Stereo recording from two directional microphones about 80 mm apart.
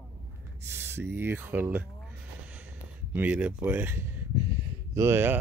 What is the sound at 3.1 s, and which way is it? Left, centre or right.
Speech, right.